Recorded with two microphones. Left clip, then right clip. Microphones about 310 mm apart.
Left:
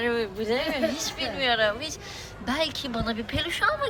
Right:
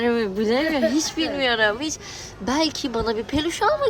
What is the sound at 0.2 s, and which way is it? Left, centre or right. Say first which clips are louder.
A woman's voice: right 5 dB; right.